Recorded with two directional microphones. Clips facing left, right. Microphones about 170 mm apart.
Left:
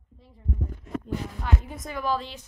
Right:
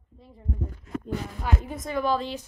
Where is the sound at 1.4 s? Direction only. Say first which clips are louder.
Right 2 dB; centre (ahead or behind).